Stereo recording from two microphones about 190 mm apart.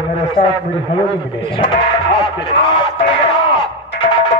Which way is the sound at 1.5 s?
25° left (ahead or behind).